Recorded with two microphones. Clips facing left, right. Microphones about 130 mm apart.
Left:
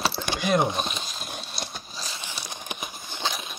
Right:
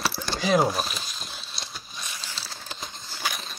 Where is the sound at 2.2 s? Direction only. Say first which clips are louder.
Left 3 dB; 15° left (ahead or behind).